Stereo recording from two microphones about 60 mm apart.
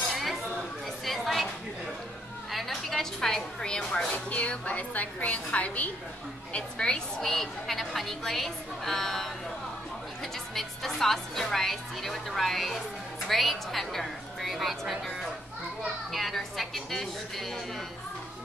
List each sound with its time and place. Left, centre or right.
0.1 s a sound: centre
2.5 s a sound: centre
4.3 s a woman's voice: left
6.5 s a woman's voice: centre
10.5 s a woman's voice: centre
16.1 s a woman's voice: centre